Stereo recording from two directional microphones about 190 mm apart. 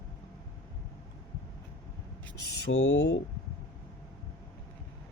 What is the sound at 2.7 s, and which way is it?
Speech, 65° left (ahead or behind).